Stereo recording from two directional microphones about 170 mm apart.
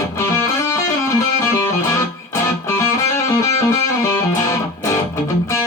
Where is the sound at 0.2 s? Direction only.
15° left (ahead or behind).